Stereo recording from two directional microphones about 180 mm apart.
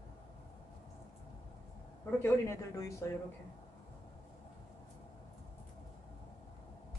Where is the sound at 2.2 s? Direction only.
15° left (ahead or behind).